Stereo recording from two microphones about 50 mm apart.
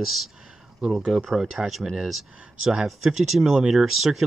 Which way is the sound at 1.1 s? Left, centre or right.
Centre.